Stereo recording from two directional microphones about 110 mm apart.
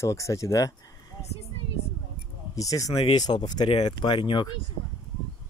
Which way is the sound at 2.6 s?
30° left (ahead or behind).